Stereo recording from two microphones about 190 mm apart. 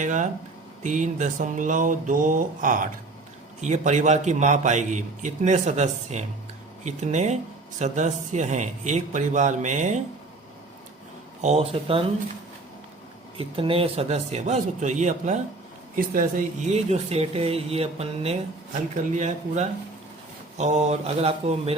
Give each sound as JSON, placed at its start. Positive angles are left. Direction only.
{"t": 0.0, "sound": "a man's voice", "side_deg": -40}
{"t": 0.8, "sound": "a sound", "side_deg": -40}
{"t": 3.6, "sound": "a man's voice", "side_deg": -40}
{"t": 11.4, "sound": "a man's voice", "side_deg": -35}
{"t": 13.3, "sound": "a man's voice", "side_deg": -30}